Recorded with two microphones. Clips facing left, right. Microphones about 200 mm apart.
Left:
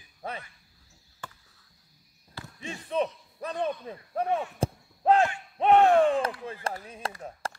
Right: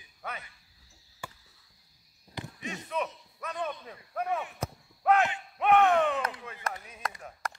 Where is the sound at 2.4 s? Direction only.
20° right (ahead or behind).